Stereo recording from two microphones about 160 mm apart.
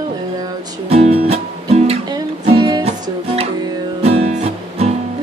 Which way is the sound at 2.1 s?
30° right (ahead or behind).